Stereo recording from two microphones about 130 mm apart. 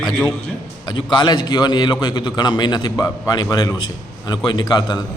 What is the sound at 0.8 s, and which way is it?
A man's voice, 35° left (ahead or behind).